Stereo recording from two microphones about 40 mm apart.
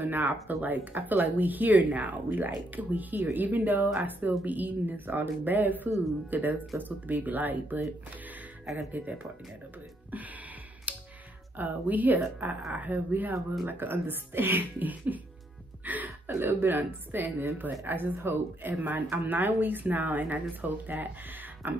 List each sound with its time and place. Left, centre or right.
0.0 s speech: right
10.9 s computer keyboard: right
11.5 s speech: right
15.8 s music: right
16.3 s speech: right
17.8 s speech: right